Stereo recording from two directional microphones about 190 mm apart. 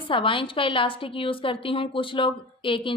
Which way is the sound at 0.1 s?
25° left (ahead or behind).